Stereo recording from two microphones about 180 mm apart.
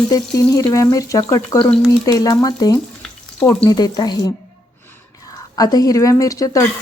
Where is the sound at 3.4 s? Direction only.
20° left (ahead or behind).